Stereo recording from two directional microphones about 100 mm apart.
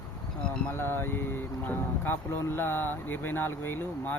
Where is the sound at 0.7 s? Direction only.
20° left (ahead or behind).